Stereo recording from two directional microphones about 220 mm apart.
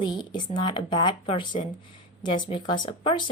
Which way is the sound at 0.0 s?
20° left (ahead or behind).